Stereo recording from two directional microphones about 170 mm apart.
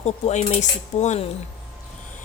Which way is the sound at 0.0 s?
40° left (ahead or behind).